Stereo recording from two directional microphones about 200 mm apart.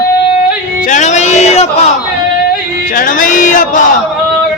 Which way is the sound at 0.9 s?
35° left (ahead or behind).